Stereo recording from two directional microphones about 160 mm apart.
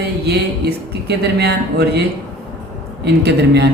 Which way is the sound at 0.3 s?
90° right.